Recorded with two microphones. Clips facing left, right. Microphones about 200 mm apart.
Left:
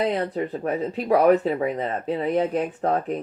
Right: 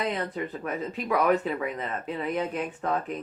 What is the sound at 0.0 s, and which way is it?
Speech, 35° left (ahead or behind).